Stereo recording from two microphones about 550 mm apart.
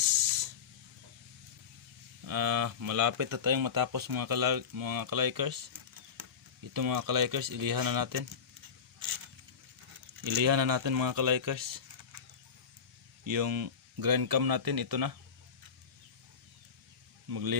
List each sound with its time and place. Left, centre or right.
2.2 s speech: right
6.7 s speech: right
10.2 s speech: right
13.2 s speech: right
17.2 s speech: right